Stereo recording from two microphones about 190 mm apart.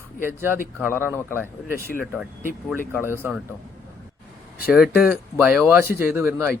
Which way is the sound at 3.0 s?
10° right (ahead or behind).